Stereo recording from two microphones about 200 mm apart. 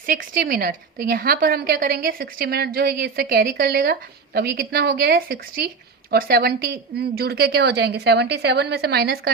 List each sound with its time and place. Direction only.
0.0 s a woman's voice: 45° right (ahead or behind)